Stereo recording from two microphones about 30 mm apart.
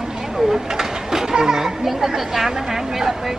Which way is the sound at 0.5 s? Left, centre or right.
Centre.